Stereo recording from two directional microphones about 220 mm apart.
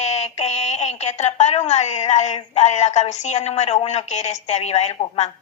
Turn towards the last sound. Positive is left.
turn(degrees=30)  # may be behind; listen again after turning